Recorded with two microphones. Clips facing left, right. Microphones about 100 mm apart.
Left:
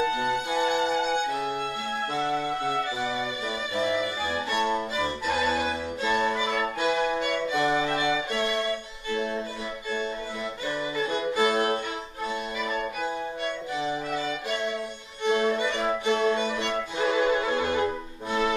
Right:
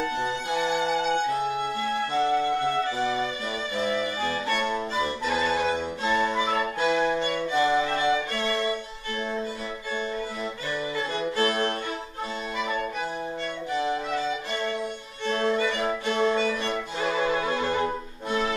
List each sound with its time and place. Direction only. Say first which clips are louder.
4.2 s music: right 2 dB; 15° left (ahead or behind)
6.9 s violin: right 1 dB; 10° left (ahead or behind)
11.1 s music: left 1 dB; 10° left (ahead or behind)
15.2 s music: left 1 dB; 15° left (ahead or behind)
15.8 s violin: even; 15° left (ahead or behind)
17.2 s music: even; 15° left (ahead or behind)